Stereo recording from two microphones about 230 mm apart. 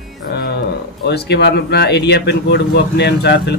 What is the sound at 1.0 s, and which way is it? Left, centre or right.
A man's voice, left.